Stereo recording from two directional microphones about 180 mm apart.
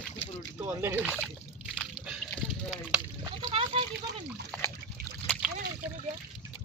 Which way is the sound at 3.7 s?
30° right (ahead or behind).